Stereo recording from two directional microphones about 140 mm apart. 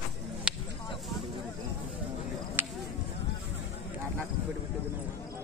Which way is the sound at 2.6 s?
15° right (ahead or behind).